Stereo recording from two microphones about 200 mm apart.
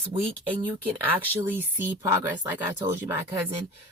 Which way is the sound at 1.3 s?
10° right (ahead or behind).